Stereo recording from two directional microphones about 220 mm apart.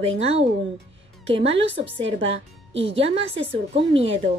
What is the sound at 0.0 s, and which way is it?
A woman's voice, 25° right (ahead or behind).